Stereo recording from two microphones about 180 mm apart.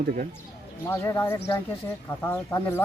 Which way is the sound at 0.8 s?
15° left (ahead or behind).